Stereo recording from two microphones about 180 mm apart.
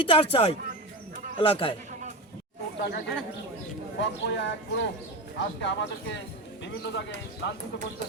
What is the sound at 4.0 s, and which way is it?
Speech, 80° left.